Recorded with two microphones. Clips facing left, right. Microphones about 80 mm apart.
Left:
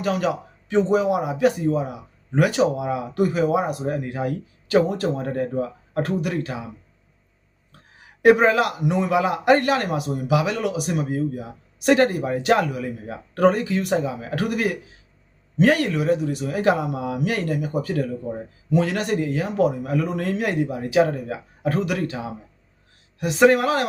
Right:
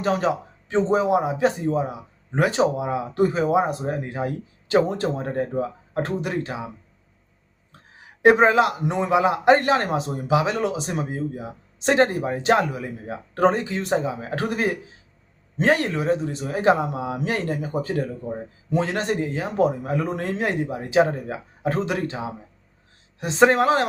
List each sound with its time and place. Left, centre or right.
0.0 s a man's voice: right
8.2 s a man's voice: right